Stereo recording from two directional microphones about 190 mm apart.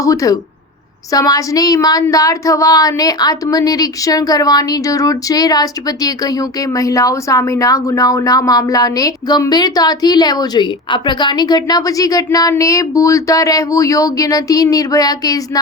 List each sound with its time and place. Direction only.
0.0 s speech: 15° left (ahead or behind)